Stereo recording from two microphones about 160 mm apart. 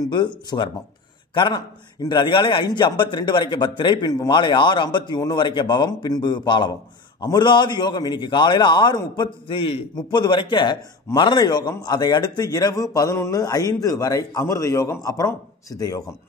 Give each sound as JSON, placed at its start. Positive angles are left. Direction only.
{"t": 0.1, "sound": "a man's voice", "side_deg": 25}